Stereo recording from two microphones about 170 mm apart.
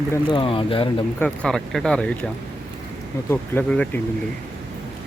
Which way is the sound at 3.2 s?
10° left (ahead or behind).